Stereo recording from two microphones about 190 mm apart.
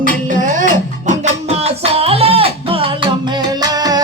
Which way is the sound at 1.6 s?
30° right (ahead or behind).